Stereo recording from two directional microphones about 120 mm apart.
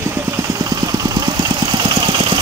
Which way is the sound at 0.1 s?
20° right (ahead or behind).